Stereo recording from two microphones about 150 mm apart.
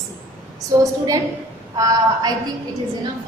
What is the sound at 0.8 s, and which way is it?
A woman's voice, 25° right (ahead or behind).